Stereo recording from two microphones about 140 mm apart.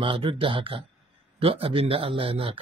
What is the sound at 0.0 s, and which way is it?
Speech, 40° right (ahead or behind).